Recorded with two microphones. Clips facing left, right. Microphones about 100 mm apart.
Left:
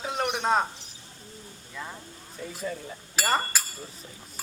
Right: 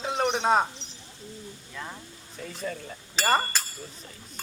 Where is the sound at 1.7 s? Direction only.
Centre (ahead or behind).